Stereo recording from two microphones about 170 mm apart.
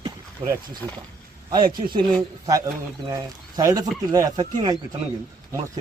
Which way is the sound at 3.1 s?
20° right (ahead or behind).